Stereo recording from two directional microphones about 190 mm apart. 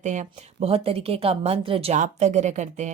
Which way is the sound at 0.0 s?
40° right (ahead or behind).